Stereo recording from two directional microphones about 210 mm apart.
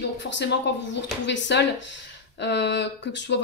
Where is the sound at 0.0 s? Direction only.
55° left (ahead or behind).